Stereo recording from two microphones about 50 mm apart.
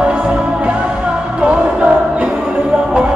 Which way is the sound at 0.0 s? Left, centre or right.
Right.